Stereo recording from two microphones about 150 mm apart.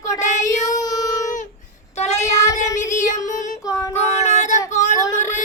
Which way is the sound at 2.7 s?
55° left (ahead or behind).